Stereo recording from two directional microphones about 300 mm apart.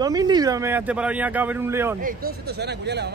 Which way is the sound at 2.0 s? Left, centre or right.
Right.